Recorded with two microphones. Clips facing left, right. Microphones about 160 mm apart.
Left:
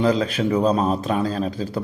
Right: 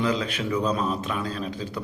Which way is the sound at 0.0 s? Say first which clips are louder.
Left 6 dB; 35° left (ahead or behind).